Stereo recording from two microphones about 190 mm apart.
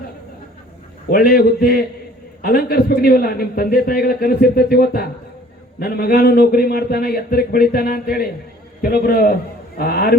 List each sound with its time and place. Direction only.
1.1 s a man's voice: 55° left (ahead or behind)